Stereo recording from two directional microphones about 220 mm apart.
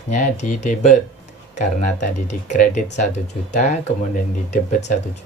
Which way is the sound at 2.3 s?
35° left (ahead or behind).